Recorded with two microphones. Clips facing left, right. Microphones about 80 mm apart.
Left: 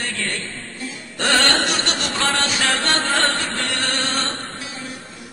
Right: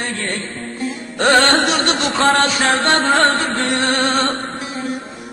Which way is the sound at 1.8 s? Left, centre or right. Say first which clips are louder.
Right 6 dB; right.